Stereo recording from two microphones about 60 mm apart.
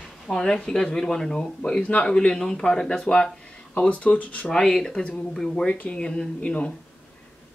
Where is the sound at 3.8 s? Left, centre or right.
Left.